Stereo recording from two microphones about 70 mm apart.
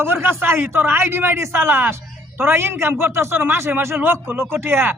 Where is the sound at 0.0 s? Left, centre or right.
Right.